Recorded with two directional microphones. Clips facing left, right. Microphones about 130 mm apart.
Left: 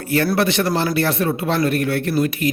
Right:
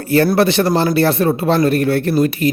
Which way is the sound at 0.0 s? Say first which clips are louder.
Right 5 dB; 35° right (ahead or behind).